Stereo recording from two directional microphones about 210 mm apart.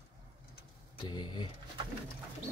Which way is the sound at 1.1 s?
20° left (ahead or behind).